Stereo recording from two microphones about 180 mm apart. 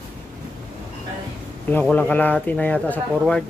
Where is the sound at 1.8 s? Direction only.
10° left (ahead or behind).